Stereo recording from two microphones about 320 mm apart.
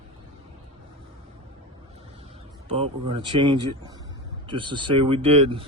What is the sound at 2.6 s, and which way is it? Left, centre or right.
A man's voice, centre.